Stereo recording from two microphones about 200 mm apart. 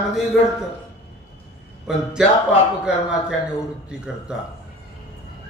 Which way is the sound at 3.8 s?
5° right (ahead or behind).